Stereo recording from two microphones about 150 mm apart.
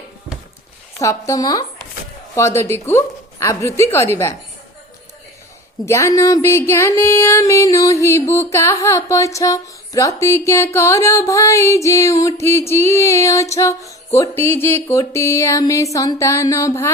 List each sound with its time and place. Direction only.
0.9 s music: 20° left (ahead or behind)
2.6 s a woman's voice: 15° left (ahead or behind)
3.4 s music: 20° left (ahead or behind)
5.8 s music: 20° left (ahead or behind)